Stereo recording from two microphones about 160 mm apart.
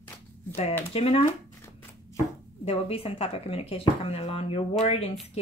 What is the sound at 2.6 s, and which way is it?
Speech, 40° left (ahead or behind).